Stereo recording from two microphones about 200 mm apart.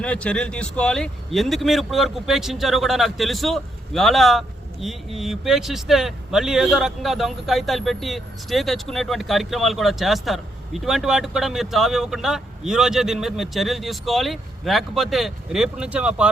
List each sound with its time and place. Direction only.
0.0 s speech: 5° left (ahead or behind)